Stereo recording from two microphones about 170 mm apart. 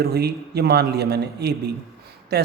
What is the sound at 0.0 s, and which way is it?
A woman's voice, 70° right (ahead or behind).